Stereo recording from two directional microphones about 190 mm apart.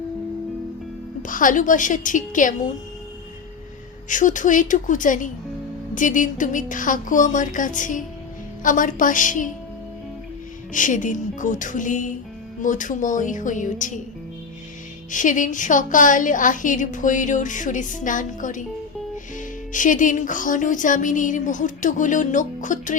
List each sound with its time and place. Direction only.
1.3 s a woman's voice: 45° left (ahead or behind)
4.1 s a woman's voice: 40° left (ahead or behind)
10.7 s a woman's voice: 40° left (ahead or behind)
15.1 s a woman's voice: 45° left (ahead or behind)
19.7 s a woman's voice: 40° left (ahead or behind)